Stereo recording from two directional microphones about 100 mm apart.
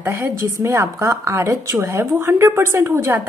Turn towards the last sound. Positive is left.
turn(degrees=-25)  # may be behind; listen again after turning